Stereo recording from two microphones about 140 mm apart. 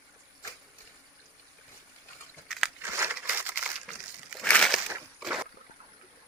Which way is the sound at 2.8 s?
20° right (ahead or behind).